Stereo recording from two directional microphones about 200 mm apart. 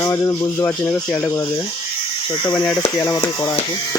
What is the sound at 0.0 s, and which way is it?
Speech, 15° left (ahead or behind).